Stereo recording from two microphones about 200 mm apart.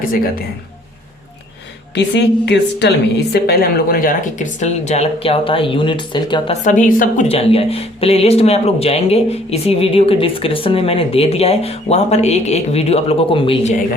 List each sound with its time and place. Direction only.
2.0 s speech: 60° left (ahead or behind); by 6.6 s 20° left (ahead or behind)
6.7 s speech: 40° left (ahead or behind)
7.3 s speech: 30° left (ahead or behind)